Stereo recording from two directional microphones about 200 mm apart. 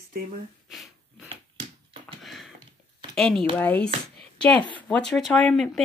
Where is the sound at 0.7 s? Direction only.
Centre (ahead or behind).